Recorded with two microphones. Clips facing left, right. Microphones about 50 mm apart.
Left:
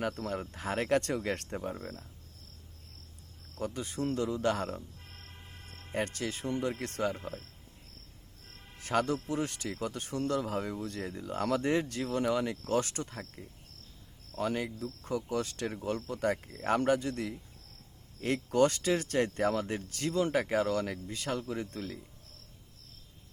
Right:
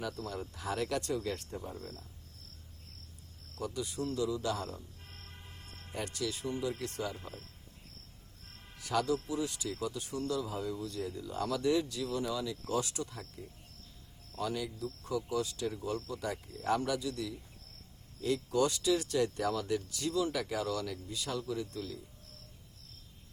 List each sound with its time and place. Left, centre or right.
0.0 s speech: left
3.6 s speech: left
5.9 s speech: left
8.8 s speech: left